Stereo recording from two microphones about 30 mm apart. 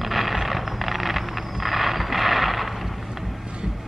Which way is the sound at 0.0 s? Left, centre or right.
Centre.